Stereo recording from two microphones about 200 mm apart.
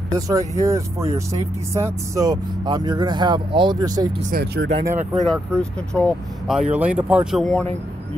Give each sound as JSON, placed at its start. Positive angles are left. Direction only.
{"t": 0.3, "sound": "speech", "side_deg": -15}
{"t": 4.3, "sound": "speech", "side_deg": -50}
{"t": 5.1, "sound": "speech", "side_deg": 5}